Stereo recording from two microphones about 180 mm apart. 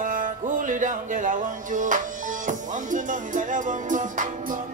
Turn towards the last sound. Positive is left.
turn(degrees=-45)  # may be behind; listen again after turning